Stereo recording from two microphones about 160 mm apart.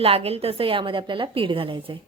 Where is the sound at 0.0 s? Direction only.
35° right (ahead or behind).